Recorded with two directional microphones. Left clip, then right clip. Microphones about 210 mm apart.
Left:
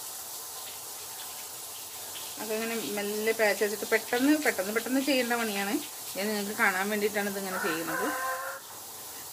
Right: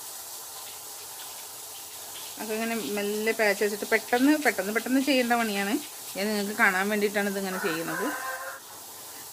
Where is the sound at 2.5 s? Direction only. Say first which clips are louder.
Right 2 dB; 45° right (ahead or behind).